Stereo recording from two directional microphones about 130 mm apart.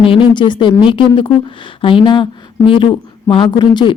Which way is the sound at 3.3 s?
35° left (ahead or behind).